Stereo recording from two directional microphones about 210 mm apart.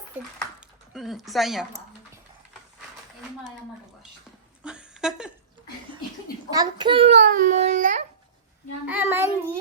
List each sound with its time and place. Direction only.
0.9 s speech: centre (ahead or behind)
4.6 s a sound: 5° right (ahead or behind)
6.5 s a child's voice: 20° right (ahead or behind); by 8.0 s 35° right (ahead or behind)
8.9 s a child's voice: 10° right (ahead or behind)